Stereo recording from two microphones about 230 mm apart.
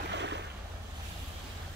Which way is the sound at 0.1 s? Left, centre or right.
Right.